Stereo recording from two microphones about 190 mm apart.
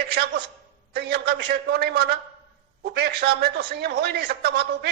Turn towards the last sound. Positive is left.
turn(degrees=-60)  # may be behind; listen again after turning